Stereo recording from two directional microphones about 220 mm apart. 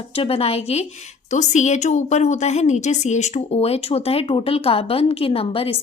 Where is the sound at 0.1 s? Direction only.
25° left (ahead or behind).